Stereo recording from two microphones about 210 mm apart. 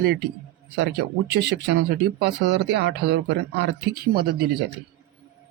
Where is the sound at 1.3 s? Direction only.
55° right (ahead or behind).